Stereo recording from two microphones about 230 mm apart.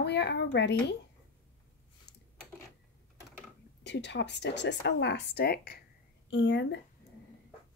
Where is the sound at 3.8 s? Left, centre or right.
Left.